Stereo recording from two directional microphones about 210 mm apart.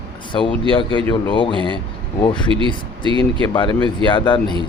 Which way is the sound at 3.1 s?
25° right (ahead or behind).